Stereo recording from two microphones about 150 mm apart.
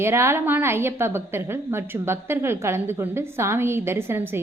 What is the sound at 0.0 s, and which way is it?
A woman's voice, 15° right (ahead or behind).